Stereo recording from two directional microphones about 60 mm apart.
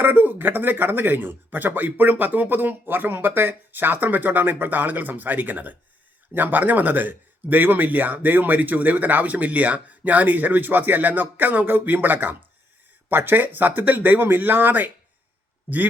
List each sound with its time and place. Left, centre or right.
0.0 s speech: right